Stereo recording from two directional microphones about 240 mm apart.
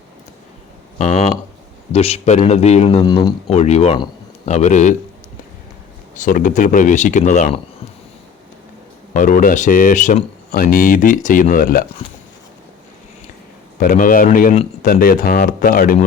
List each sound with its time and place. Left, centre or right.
0.9 s speech: left
6.1 s speech: left
9.1 s speech: left
13.7 s speech: left